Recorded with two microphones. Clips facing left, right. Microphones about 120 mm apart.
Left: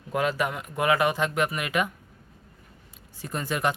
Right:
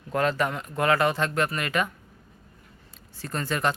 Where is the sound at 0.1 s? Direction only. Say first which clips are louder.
Right 1 dB; 10° left (ahead or behind).